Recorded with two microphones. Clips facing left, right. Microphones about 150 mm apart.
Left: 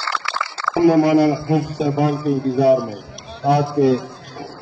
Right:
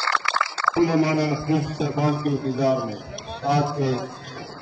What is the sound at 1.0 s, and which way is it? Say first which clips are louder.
Speech: left 7 dB; 70° left (ahead or behind).